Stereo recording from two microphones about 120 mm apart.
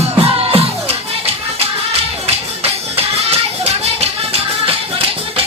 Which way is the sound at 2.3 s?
55° right (ahead or behind).